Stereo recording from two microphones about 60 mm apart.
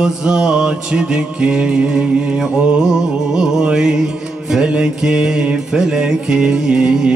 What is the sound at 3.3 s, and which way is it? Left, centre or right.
Music, centre.